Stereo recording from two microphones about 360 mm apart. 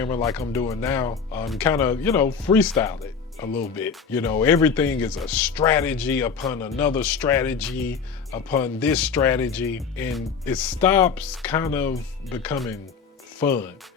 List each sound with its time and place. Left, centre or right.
0.0 s speech: centre